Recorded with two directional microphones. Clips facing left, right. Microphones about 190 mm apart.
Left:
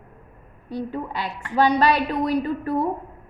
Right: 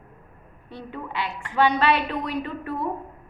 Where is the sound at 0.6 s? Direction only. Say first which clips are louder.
Left 7 dB; 40° left (ahead or behind).